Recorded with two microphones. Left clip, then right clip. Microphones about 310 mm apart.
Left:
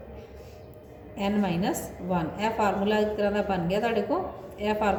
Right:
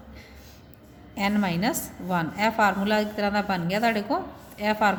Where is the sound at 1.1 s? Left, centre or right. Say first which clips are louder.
Right 2 dB; right.